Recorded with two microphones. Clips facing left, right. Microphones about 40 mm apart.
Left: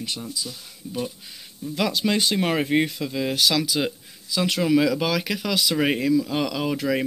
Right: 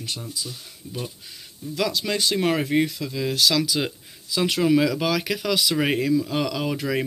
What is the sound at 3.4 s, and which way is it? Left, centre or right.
Speech, centre.